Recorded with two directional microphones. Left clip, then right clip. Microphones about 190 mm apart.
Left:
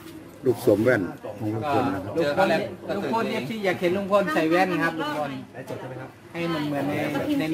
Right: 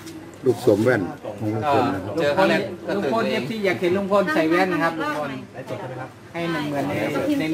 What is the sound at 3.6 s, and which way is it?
Speech, 30° left (ahead or behind).